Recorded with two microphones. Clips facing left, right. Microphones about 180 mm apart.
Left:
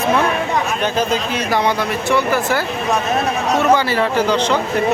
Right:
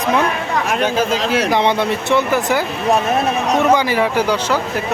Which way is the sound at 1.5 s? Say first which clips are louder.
Left 1 dB; 25° right (ahead or behind).